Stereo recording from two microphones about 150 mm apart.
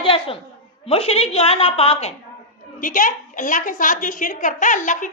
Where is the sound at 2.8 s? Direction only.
65° left (ahead or behind).